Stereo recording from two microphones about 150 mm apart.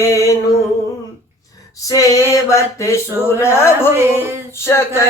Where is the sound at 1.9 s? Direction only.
20° left (ahead or behind).